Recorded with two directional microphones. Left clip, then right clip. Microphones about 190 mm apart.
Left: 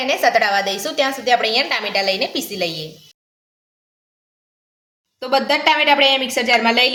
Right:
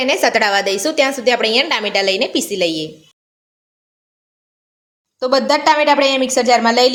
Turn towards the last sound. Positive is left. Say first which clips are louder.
# right 3 dB
turn(degrees=-35)  # may be behind; listen again after turning